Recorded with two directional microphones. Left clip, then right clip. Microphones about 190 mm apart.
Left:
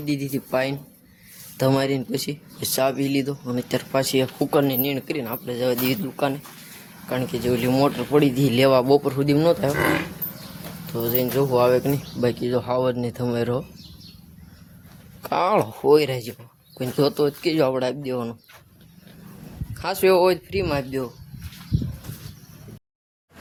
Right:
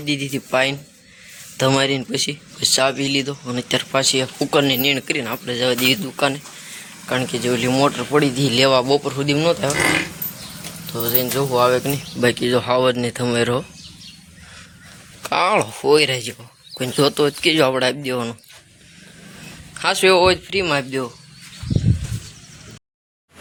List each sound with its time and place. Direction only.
0.0 s speech: 5° left (ahead or behind)
4.0 s speech: 15° left (ahead or behind)
4.5 s speech: 5° left (ahead or behind)
11.0 s speech: 15° left (ahead or behind)
12.2 s speech: 5° right (ahead or behind)
15.2 s speech: 15° left (ahead or behind)
19.8 s speech: centre (ahead or behind)